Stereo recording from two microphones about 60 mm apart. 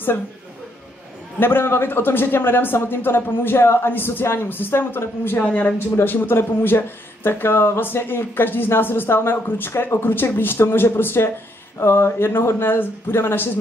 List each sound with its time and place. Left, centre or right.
1.4 s speech: left
5.4 s speech: left
5.9 s speech: left